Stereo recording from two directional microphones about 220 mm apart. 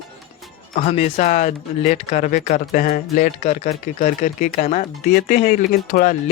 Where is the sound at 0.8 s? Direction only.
30° left (ahead or behind).